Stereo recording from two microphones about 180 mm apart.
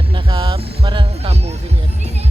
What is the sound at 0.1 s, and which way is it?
Music, 30° right (ahead or behind).